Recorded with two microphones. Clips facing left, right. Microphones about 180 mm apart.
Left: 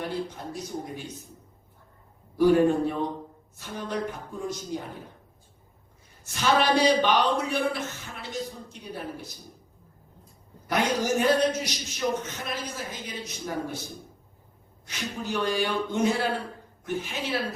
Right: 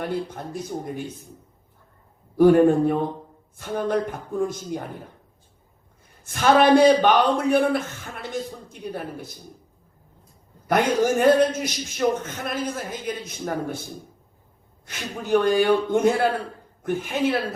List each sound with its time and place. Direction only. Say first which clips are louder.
0.0 s a man's voice: right 4 dB; 55° right (ahead or behind)
2.4 s a man's voice: right 5 dB; 50° right (ahead or behind)
6.2 s a man's voice: right 7 dB; 55° right (ahead or behind)
10.7 s a man's voice: right 5 dB; 55° right (ahead or behind)
14.8 s a man's voice: right 7 dB; 55° right (ahead or behind)